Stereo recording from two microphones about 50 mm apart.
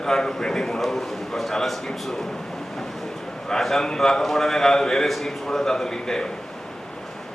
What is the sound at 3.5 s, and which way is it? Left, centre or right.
A man's voice, centre.